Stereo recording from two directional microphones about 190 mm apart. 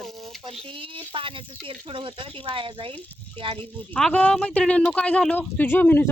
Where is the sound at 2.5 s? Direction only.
25° right (ahead or behind).